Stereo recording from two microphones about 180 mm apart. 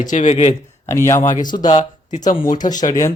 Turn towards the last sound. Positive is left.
turn(degrees=15)  # may be behind; listen again after turning